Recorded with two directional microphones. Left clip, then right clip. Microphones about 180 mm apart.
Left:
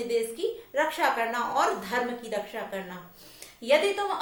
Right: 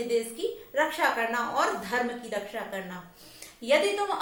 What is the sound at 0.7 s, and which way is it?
A woman's voice, 20° left (ahead or behind).